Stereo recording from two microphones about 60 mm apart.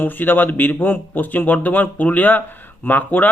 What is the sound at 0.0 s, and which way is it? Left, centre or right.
Speech, left.